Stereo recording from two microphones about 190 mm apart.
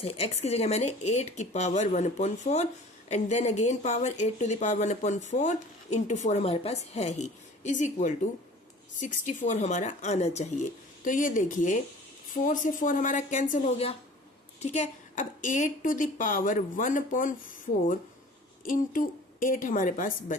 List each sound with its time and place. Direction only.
0.0 s a woman's voice: 35° left (ahead or behind)
18.6 s a woman's voice: 45° left (ahead or behind)